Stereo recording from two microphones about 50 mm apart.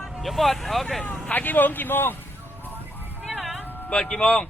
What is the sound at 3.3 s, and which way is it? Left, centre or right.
Music, right.